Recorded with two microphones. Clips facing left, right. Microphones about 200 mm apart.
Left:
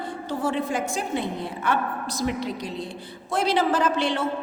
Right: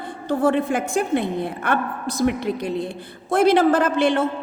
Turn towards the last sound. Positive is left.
turn(degrees=-50)  # may be behind; listen again after turning